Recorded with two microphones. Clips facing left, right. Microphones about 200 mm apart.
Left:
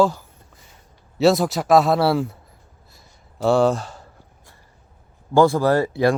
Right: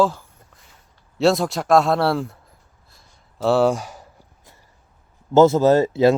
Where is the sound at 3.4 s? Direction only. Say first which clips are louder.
Even; 5° right (ahead or behind).